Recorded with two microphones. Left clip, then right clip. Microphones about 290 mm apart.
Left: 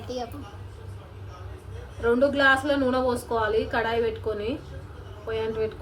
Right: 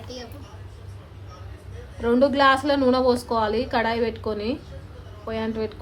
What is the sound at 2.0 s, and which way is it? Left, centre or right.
A woman's voice, right.